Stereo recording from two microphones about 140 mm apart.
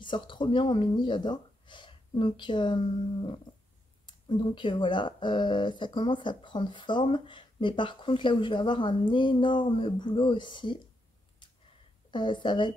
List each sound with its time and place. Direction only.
0.0 s speech: 35° left (ahead or behind)
12.1 s speech: 35° left (ahead or behind)